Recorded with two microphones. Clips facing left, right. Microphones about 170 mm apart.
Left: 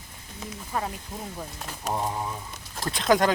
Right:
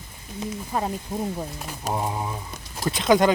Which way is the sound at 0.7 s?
20° right (ahead or behind).